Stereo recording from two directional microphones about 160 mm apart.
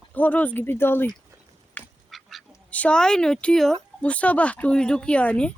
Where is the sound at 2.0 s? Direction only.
Centre (ahead or behind).